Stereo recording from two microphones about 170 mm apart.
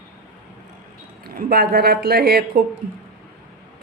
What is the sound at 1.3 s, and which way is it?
Speech, 60° right (ahead or behind).